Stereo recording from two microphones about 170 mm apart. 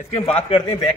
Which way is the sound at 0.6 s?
25° left (ahead or behind).